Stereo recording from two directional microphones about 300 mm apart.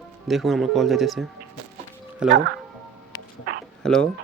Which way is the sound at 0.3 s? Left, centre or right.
Centre.